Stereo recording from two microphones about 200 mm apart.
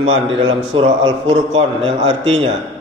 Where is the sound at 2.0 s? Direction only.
70° right (ahead or behind).